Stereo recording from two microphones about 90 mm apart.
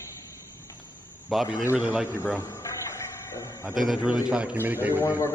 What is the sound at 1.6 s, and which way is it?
Speech, 20° right (ahead or behind).